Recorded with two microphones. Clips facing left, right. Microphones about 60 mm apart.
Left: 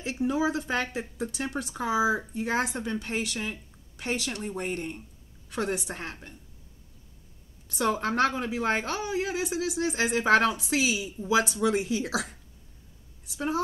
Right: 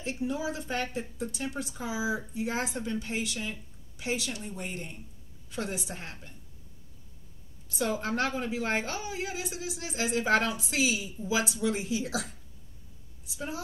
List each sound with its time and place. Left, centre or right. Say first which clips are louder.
0.0 s speech: left 5 dB; left
7.6 s a woman's voice: left 4 dB; left
8.1 s a woman's voice: left 4 dB; left